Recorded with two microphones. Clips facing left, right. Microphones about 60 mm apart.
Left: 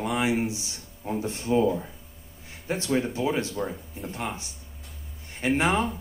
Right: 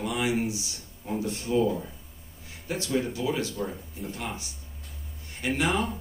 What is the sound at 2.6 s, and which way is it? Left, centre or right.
Speech, left.